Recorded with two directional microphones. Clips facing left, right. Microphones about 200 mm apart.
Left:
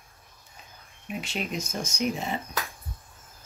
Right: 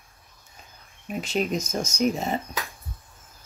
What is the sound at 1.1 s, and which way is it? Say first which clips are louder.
Speech: right 6 dB; 40° right (ahead or behind).